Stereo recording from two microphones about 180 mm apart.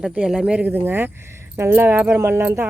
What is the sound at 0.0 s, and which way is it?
Speech, 5° right (ahead or behind).